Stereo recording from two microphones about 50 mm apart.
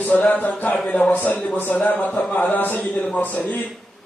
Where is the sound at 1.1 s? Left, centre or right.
Left.